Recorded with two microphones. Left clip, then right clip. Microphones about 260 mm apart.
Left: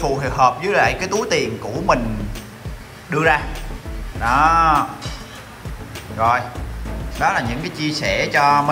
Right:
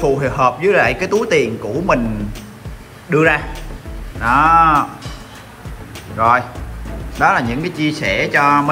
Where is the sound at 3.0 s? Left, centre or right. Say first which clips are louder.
Right 3 dB; centre.